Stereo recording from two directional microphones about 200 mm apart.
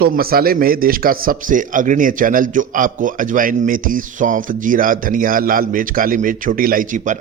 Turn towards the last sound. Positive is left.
turn(degrees=-40)  # may be behind; listen again after turning